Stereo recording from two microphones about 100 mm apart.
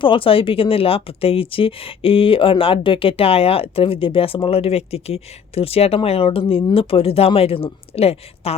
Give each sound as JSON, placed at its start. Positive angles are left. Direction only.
{"t": 0.0, "sound": "a woman's voice", "side_deg": 60}